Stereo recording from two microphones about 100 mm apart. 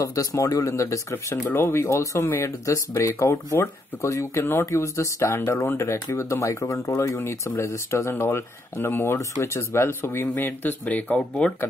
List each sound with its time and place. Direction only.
0.0 s speech: 35° left (ahead or behind); by 11.5 s 10° left (ahead or behind)